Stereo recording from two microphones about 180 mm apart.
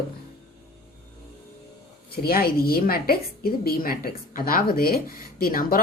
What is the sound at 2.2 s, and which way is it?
A woman's voice, 55° left (ahead or behind).